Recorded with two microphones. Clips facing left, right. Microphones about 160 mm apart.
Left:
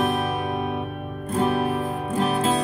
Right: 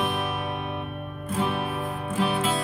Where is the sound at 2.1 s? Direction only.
40° left (ahead or behind).